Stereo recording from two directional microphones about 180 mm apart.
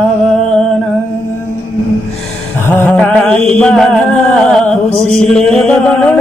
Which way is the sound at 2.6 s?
10° left (ahead or behind).